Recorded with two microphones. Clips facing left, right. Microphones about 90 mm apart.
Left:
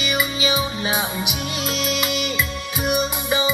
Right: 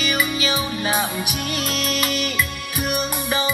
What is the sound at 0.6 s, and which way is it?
Music, 25° left (ahead or behind).